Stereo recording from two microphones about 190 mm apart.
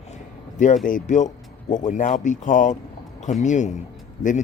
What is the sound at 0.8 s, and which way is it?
Speech, 40° left (ahead or behind).